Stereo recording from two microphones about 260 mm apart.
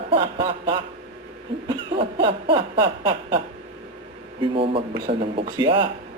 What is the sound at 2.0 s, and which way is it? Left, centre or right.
Speech, centre.